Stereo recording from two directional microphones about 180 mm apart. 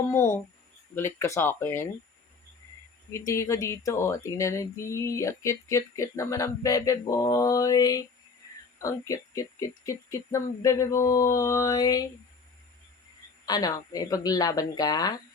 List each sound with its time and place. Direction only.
0.1 s speech: 20° left (ahead or behind)
3.1 s speech: 15° left (ahead or behind)
13.4 s speech: 20° left (ahead or behind)